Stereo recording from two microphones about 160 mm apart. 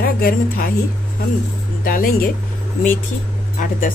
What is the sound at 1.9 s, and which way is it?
Speech, 60° left (ahead or behind).